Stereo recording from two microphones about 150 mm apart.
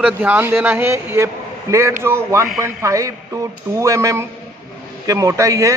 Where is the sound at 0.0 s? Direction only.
10° right (ahead or behind).